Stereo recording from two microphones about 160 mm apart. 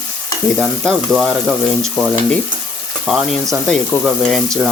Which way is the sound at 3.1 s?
Centre (ahead or behind).